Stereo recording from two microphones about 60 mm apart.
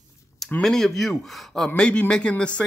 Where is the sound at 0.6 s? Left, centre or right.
Centre.